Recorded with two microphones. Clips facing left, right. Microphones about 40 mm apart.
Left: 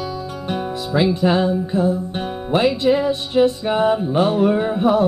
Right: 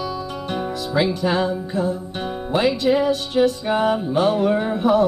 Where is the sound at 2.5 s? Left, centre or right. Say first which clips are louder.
Left 2 dB; centre.